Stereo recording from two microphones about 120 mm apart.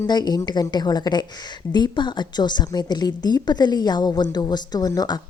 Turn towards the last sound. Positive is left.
turn(degrees=35)  # may be behind; listen again after turning